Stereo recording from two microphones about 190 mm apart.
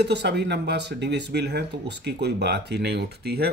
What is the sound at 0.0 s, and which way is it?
Speech, 60° right (ahead or behind).